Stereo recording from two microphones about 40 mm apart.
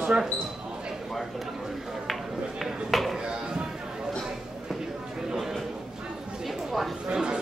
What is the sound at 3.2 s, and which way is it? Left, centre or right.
Chop, right.